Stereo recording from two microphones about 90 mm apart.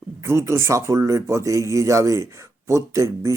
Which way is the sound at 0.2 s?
30° right (ahead or behind).